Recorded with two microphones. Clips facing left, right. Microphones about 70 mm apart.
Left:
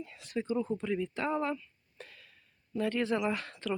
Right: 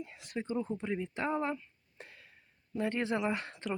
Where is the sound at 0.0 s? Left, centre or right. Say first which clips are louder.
Left 3 dB; right.